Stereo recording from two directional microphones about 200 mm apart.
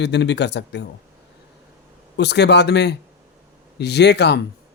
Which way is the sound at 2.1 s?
60° left (ahead or behind).